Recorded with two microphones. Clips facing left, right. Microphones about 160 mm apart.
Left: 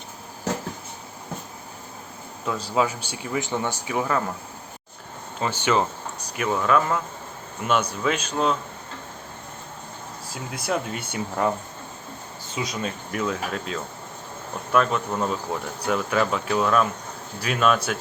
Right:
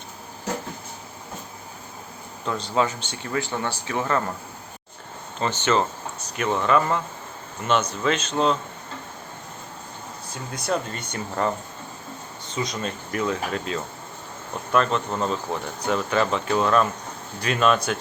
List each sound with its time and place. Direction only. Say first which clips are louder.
2.5 s speech: even; 5° left (ahead or behind)
5.4 s speech: even; 10° left (ahead or behind)
10.3 s speech: right 1 dB; 5° left (ahead or behind)
12.5 s speech: right 1 dB; 5° left (ahead or behind)